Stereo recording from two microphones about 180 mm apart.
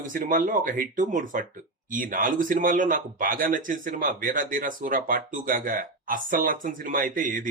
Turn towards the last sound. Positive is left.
turn(degrees=-50)  # may be behind; listen again after turning